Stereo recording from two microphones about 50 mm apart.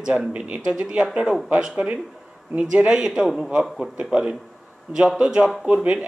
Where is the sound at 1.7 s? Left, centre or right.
Right.